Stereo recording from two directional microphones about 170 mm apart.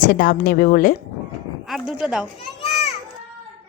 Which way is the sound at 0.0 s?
50° left (ahead or behind).